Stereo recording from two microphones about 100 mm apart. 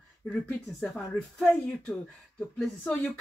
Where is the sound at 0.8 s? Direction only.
5° left (ahead or behind).